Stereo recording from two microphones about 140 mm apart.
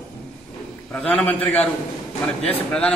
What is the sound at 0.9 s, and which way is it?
A man's voice, 10° left (ahead or behind).